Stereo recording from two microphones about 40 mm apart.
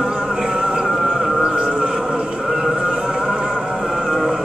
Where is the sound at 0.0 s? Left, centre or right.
Right.